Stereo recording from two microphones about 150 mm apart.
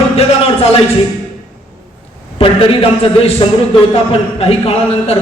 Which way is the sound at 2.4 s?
40° left (ahead or behind).